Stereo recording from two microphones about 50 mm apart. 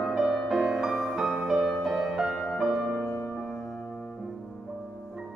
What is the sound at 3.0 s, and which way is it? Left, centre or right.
Music, left.